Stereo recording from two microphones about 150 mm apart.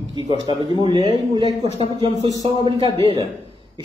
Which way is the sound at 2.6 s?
35° right (ahead or behind).